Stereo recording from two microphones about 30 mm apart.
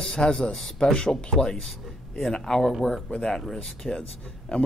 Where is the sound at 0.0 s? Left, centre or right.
Centre.